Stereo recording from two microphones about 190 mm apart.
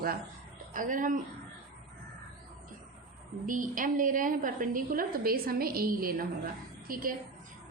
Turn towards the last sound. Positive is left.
turn(degrees=-50)  # may be behind; listen again after turning